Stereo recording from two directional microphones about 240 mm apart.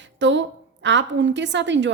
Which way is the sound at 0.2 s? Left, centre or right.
Right.